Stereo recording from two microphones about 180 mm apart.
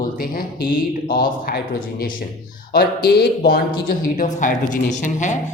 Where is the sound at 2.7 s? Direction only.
65° left (ahead or behind); by 5.3 s 45° left (ahead or behind).